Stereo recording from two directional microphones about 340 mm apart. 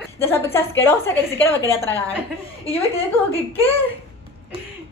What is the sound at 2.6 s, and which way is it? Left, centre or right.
Speech, centre.